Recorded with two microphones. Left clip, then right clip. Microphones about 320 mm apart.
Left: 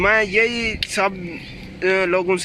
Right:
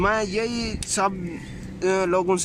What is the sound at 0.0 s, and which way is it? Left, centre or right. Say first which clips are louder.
Speech: left 7 dB; centre.